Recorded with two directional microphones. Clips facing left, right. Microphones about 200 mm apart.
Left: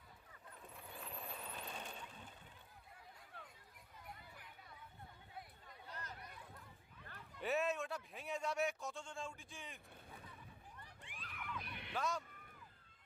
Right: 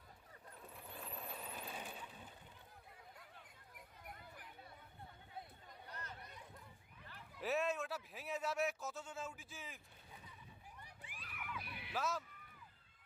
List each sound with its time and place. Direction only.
0.7 s vehicle: centre (ahead or behind)
6.0 s chatter: 30° right (ahead or behind)
7.3 s speech: centre (ahead or behind)
10.8 s a sound: 10° right (ahead or behind)